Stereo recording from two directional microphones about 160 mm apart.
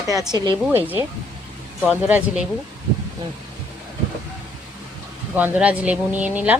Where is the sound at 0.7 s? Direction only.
10° right (ahead or behind).